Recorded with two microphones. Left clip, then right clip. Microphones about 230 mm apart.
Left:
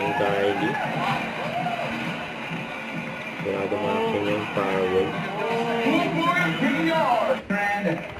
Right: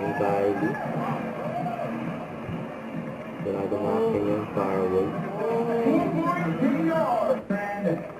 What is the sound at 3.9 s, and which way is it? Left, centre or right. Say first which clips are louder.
Music: right 2 dB; centre.